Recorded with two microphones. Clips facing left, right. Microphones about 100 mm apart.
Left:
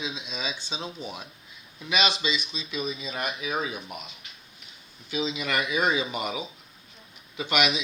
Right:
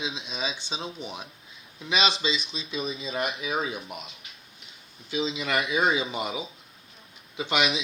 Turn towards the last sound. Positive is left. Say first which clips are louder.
# even
turn(degrees=-25)  # may be behind; listen again after turning